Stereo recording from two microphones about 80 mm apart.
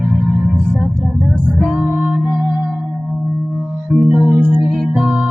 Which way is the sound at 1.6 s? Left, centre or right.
Right.